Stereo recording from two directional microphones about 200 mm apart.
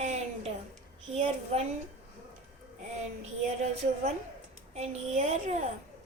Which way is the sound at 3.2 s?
35° right (ahead or behind).